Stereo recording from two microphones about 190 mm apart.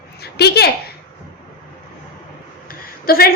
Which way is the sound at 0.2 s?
60° left (ahead or behind).